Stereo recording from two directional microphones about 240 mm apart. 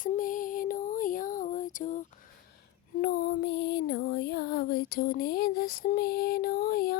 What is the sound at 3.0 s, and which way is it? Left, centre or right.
Female singing, left.